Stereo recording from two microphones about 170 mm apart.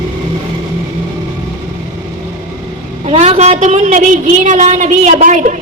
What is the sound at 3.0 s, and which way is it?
A woman's voice, 35° right (ahead or behind).